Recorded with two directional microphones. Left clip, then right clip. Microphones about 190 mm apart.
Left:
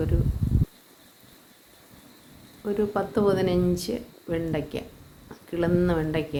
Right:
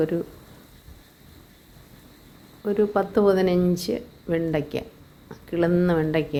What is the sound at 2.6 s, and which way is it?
Speech, 20° right (ahead or behind).